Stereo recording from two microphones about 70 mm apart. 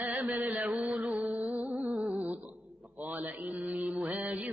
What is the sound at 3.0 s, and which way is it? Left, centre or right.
Speech, right.